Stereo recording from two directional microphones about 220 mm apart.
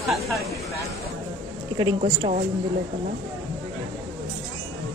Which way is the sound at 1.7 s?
25° right (ahead or behind).